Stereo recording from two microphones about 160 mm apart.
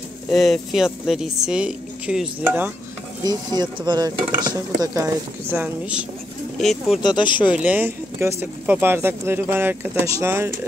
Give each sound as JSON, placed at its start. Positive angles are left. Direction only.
{"t": 0.3, "sound": "a woman's voice", "side_deg": 0}
{"t": 3.3, "sound": "speech", "side_deg": -25}
{"t": 6.6, "sound": "a woman's voice", "side_deg": 0}
{"t": 7.0, "sound": "speech", "side_deg": 30}
{"t": 7.4, "sound": "speech", "side_deg": -10}